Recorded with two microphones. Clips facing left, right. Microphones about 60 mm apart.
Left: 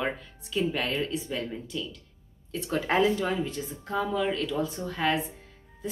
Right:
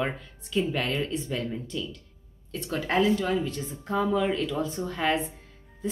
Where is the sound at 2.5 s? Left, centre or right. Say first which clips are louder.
Left 1 dB; centre.